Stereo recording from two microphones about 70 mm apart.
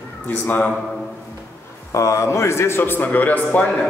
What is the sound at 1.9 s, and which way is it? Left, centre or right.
A man's voice, left.